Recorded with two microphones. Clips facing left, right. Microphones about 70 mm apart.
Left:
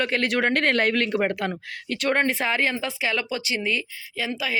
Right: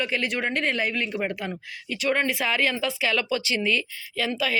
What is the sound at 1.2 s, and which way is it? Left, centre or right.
Speech, left.